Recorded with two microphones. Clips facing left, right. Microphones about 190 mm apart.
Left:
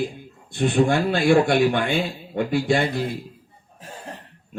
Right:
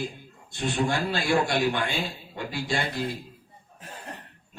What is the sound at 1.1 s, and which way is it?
A man's voice, 55° left (ahead or behind).